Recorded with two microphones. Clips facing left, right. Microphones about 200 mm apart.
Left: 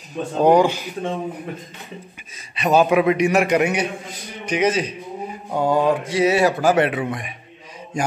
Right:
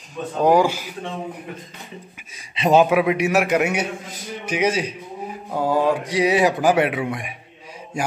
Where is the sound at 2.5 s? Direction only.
25° right (ahead or behind).